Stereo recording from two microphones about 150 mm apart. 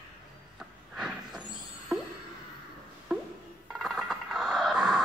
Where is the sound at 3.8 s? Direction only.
Centre (ahead or behind).